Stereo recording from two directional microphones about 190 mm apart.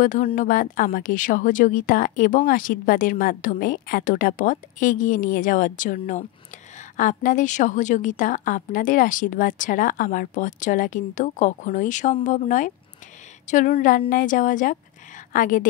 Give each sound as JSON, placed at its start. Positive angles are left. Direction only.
{"t": 0.0, "sound": "a woman's voice", "side_deg": 45}